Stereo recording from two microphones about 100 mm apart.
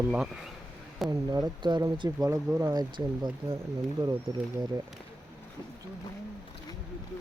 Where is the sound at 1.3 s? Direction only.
45° right (ahead or behind).